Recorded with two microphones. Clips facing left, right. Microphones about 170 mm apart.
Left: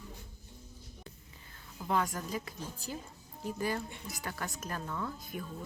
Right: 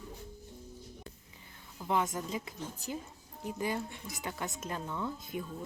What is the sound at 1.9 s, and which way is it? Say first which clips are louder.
Speech: right 1 dB; 20° right (ahead or behind).